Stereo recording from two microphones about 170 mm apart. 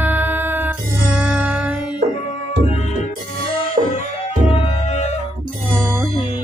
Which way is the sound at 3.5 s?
35° left (ahead or behind).